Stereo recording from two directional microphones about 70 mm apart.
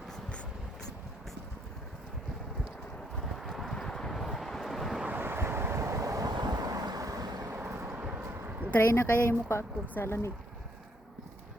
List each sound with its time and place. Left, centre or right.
3.2 s vehicle: centre
5.0 s waves: right
6.2 s wind noise: right
7.5 s vehicle: right
7.9 s vehicle: right
8.2 s a sound: right
8.7 s speech: left